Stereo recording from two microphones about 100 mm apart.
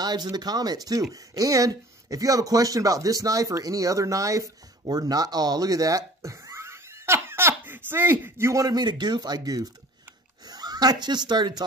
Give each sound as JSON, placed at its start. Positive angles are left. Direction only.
{"t": 0.0, "sound": "speech", "side_deg": -45}